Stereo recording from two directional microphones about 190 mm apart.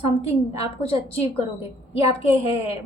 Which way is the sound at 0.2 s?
30° left (ahead or behind).